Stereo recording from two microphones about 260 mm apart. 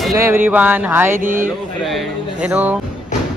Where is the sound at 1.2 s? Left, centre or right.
Right.